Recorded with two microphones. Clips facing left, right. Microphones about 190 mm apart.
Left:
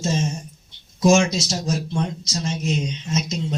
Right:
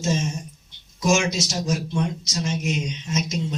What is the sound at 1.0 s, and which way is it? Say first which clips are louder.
Speech: left 5 dB; 30° left (ahead or behind).